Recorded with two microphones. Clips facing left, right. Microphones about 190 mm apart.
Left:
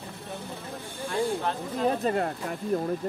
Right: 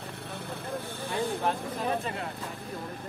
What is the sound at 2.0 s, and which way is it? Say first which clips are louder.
Speech: left 9 dB; 40° left (ahead or behind).